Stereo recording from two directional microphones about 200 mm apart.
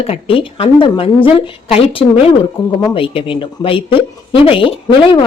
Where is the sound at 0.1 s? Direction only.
25° left (ahead or behind).